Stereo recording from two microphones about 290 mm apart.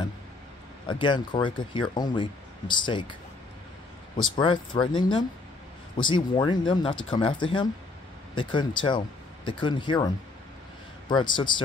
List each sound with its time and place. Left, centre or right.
0.8 s speech: centre
4.4 s speech: centre